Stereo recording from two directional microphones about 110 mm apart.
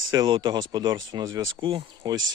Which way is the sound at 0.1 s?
45° right (ahead or behind).